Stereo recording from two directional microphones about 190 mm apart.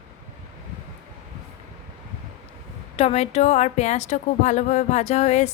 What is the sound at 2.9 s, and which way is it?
A woman's voice, 35° left (ahead or behind).